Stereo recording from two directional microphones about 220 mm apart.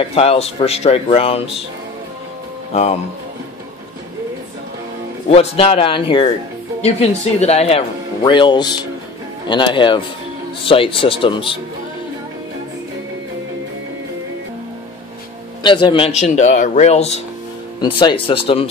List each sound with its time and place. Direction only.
0.1 s speech: 25° left (ahead or behind)
2.7 s speech: 30° left (ahead or behind)
5.3 s speech: 25° left (ahead or behind)
15.6 s speech: 20° left (ahead or behind)